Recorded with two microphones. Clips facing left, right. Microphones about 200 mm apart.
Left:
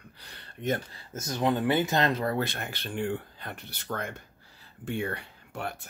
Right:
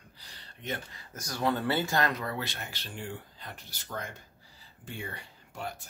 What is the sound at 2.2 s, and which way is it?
Speech, 50° left (ahead or behind).